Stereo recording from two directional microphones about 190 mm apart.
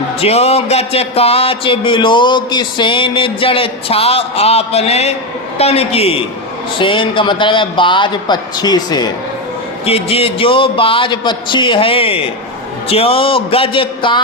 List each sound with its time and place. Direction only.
0.2 s a man's voice: 35° left (ahead or behind)